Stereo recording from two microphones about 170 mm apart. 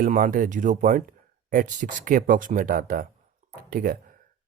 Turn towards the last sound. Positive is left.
turn(degrees=-60)  # may be behind; listen again after turning